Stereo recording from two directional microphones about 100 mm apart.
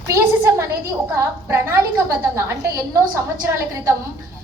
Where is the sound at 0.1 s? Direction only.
25° right (ahead or behind).